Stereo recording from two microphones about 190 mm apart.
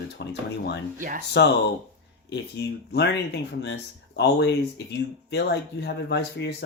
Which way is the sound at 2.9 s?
65° left (ahead or behind).